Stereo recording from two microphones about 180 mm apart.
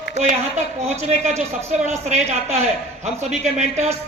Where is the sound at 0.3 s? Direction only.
40° right (ahead or behind).